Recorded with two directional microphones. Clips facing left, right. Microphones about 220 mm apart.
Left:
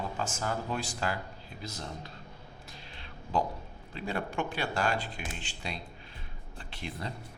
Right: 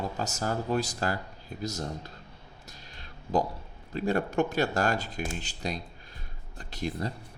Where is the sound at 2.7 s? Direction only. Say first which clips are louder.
Right 1 dB; 40° right (ahead or behind).